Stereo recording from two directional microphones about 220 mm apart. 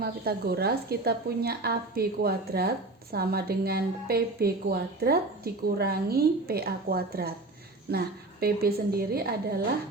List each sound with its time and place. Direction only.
0.0 s a woman's voice: 45° right (ahead or behind)